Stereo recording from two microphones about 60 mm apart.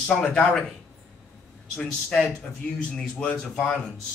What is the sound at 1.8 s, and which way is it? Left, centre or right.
Speech, centre.